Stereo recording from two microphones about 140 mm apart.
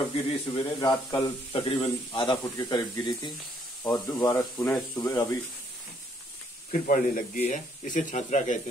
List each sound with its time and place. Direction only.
0.1 s speech: 45° left (ahead or behind)
0.7 s speech: 30° left (ahead or behind)
2.3 s speech: 25° left (ahead or behind)
6.7 s speech: 70° left (ahead or behind)